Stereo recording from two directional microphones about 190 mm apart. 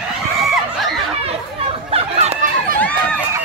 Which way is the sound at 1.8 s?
30° right (ahead or behind).